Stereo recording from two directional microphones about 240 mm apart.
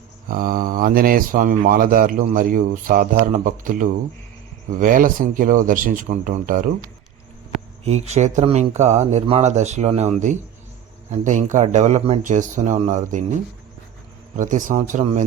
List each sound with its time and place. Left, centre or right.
0.3 s speech: right
7.9 s speech: right
14.3 s speech: right